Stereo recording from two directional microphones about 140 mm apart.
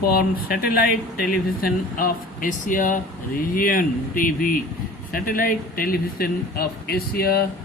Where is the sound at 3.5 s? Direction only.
80° left.